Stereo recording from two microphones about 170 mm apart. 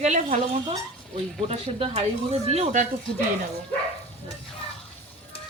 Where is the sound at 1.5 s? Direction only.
40° right (ahead or behind).